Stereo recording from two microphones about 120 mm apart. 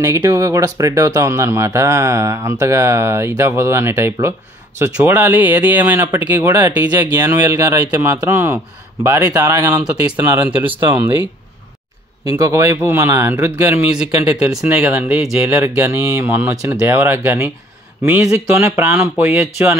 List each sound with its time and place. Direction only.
0.0 s speech: 25° right (ahead or behind)
10.8 s speech: 40° right (ahead or behind)
12.3 s speech: 25° right (ahead or behind)
13.9 s speech: 5° right (ahead or behind)